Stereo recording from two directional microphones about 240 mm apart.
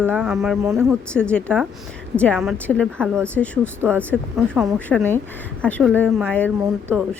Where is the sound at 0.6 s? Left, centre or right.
Centre.